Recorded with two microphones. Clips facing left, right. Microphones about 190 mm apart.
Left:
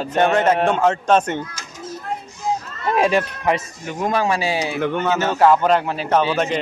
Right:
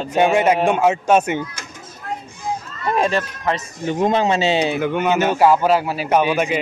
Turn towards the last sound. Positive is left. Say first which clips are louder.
# right 1 dB
turn(degrees=-10)  # may be behind; listen again after turning